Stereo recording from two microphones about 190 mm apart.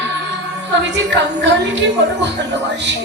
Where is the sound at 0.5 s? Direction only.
70° right (ahead or behind).